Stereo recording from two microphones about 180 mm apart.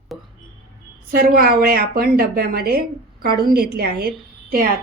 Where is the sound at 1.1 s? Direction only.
55° right (ahead or behind).